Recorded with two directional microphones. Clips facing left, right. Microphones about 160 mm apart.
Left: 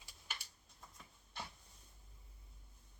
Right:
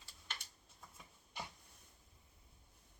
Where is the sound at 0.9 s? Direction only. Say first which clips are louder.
Right 1 dB; 10° right (ahead or behind).